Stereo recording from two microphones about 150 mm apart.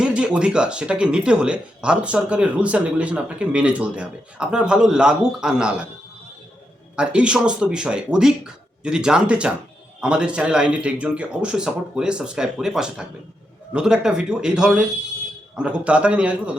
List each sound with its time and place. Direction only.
0.0 s speech: 5° right (ahead or behind)
6.9 s speech: 5° right (ahead or behind)